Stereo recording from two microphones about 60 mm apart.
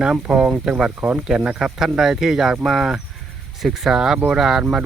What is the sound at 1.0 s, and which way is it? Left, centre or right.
Speech, right.